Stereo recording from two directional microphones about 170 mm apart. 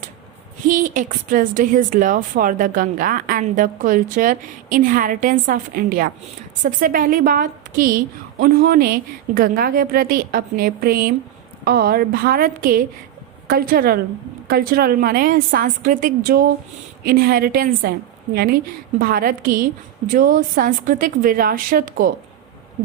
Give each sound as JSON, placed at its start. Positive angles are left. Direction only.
{"t": 0.7, "sound": "a woman's voice", "side_deg": -50}